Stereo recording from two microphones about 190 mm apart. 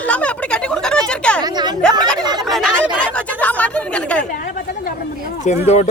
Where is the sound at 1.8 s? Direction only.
5° left (ahead or behind).